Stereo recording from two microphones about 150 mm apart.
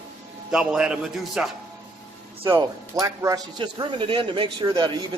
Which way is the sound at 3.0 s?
20° right (ahead or behind).